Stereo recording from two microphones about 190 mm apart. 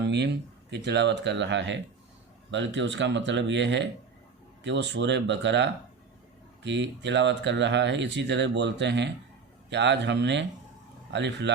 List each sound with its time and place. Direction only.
0.0 s speech: 65° right (ahead or behind)